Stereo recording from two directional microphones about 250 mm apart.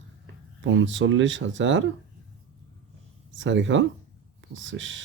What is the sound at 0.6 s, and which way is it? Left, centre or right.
Speech, right.